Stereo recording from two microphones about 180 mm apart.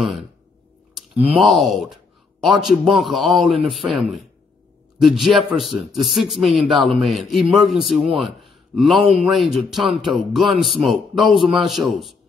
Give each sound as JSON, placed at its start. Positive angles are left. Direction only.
{"t": 0.0, "sound": "speech", "side_deg": 0}
{"t": 1.3, "sound": "a man's voice", "side_deg": 0}